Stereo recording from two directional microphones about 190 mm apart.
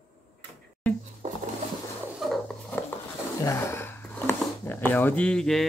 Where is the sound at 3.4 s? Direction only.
15° left (ahead or behind).